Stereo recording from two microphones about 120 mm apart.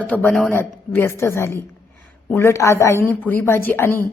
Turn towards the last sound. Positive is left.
turn(degrees=20)  # may be behind; listen again after turning